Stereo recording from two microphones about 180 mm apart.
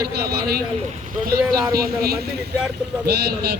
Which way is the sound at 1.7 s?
60° right (ahead or behind).